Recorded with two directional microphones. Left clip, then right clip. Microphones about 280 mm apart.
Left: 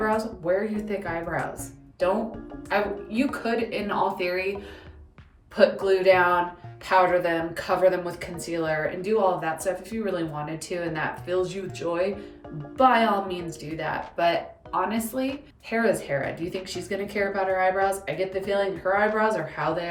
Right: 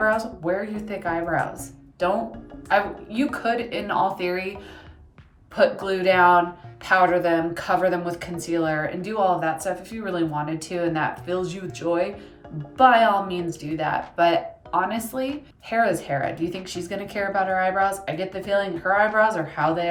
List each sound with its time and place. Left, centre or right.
0.0 s speech: centre
2.6 s speech: centre
5.8 s speech: centre